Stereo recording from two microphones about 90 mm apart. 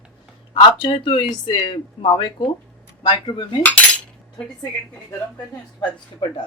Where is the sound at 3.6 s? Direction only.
15° left (ahead or behind).